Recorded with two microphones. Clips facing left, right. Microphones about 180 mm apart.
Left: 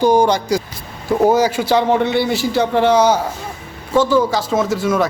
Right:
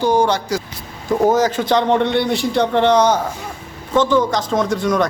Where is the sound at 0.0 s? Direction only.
15° left (ahead or behind).